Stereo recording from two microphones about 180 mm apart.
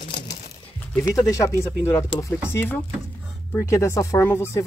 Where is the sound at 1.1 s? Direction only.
15° left (ahead or behind).